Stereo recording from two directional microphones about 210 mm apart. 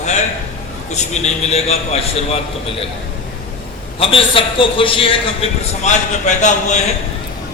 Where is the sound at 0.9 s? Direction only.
30° left (ahead or behind).